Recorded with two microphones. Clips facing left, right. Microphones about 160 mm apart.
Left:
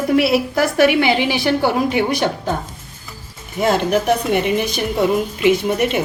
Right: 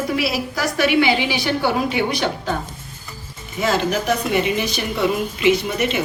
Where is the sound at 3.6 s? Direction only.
55° left (ahead or behind).